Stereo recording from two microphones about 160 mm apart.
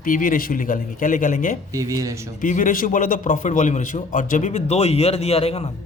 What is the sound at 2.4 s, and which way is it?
A man's voice, 55° left (ahead or behind).